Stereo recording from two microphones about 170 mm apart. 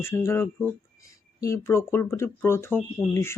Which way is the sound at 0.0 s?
15° left (ahead or behind).